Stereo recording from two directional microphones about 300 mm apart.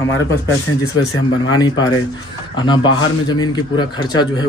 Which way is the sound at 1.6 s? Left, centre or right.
Centre.